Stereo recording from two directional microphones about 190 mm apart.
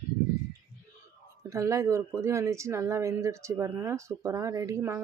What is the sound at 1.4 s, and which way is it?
Speech, 15° right (ahead or behind).